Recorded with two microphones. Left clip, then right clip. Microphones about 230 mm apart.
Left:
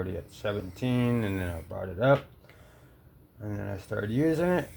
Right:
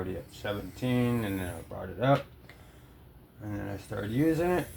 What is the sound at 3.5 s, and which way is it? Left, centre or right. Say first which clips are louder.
Speech: left 2 dB; left.